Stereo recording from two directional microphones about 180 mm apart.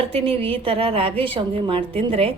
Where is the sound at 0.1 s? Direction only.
30° right (ahead or behind).